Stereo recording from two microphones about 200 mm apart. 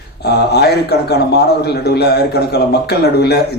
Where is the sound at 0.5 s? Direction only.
55° left (ahead or behind).